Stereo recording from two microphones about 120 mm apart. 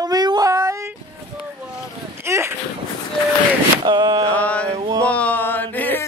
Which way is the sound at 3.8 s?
40° right (ahead or behind).